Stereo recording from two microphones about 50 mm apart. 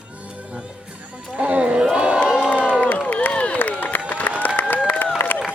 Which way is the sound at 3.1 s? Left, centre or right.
Left.